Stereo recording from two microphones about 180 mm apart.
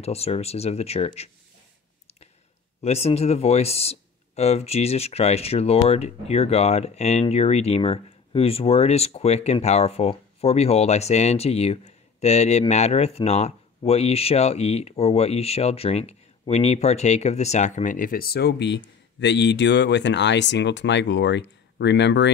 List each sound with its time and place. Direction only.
0.0 s speech: 35° left (ahead or behind)
2.8 s speech: 35° left (ahead or behind); by 22.3 s 80° left